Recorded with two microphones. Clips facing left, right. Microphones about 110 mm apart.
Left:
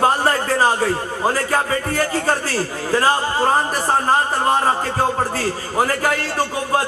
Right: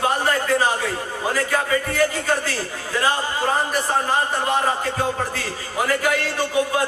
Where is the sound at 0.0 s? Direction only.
40° left (ahead or behind).